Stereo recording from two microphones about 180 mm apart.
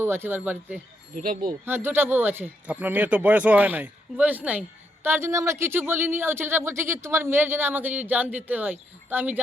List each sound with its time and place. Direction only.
0.0 s speech: 15° right (ahead or behind)
1.1 s speech: 50° right (ahead or behind)
1.6 s speech: 10° right (ahead or behind)